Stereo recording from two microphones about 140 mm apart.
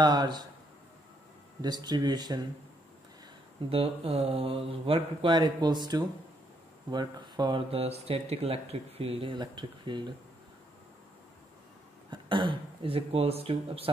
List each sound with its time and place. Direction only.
0.0 s speech: 30° right (ahead or behind)
1.6 s speech: 30° right (ahead or behind)
3.7 s speech: 45° right (ahead or behind)
12.1 s speech: 35° right (ahead or behind)